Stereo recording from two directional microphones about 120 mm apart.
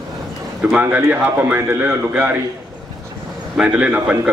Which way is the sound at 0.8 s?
15° right (ahead or behind).